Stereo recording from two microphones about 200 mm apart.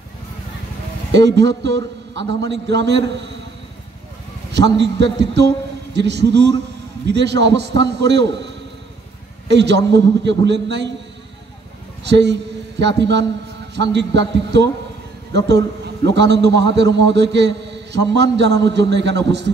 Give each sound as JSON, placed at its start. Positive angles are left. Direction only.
{"t": 1.1, "sound": "a man's voice", "side_deg": -60}
{"t": 4.5, "sound": "a man's voice", "side_deg": -60}
{"t": 9.5, "sound": "a man's voice", "side_deg": -60}
{"t": 12.1, "sound": "a man's voice", "side_deg": -60}